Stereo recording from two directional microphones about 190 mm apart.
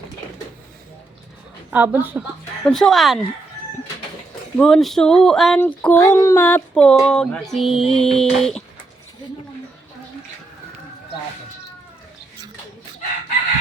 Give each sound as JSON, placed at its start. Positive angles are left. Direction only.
{"t": 1.7, "sound": "a woman's voice", "side_deg": -10}
{"t": 2.6, "sound": "speech", "side_deg": 5}
{"t": 4.5, "sound": "speech", "side_deg": 0}